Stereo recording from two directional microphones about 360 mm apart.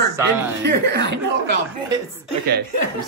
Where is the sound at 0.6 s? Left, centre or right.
Right.